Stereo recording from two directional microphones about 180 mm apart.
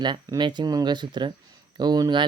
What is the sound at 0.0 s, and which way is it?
Speech, 25° right (ahead or behind).